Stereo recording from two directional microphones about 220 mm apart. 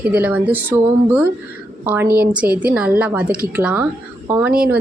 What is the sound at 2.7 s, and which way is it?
Speech, 5° right (ahead or behind).